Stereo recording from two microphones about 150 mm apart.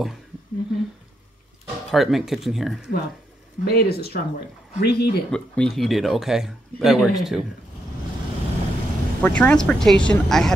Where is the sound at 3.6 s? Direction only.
90° left.